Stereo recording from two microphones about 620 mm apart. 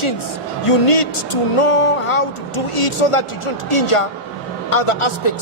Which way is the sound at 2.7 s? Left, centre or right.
Left.